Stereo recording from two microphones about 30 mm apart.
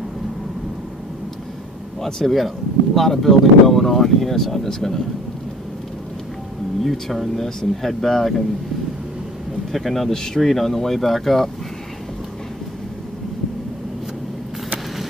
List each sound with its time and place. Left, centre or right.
2.0 s speech: centre
2.3 s speech: centre
6.8 s speech: centre
9.7 s speech: centre
10.1 s speech: centre
10.4 s speech: centre